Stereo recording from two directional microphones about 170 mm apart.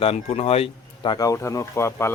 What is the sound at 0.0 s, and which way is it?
Speech, 35° left (ahead or behind).